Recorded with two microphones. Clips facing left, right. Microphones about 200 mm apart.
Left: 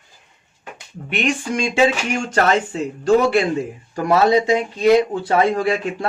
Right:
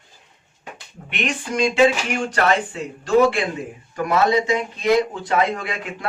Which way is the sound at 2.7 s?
40° left (ahead or behind).